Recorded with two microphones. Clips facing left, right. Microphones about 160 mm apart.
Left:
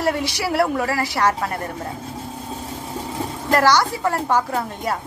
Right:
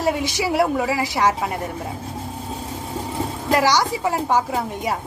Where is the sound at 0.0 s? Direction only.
15° right (ahead or behind).